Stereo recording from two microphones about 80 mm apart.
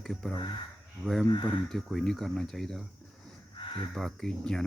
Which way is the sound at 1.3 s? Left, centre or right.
Left.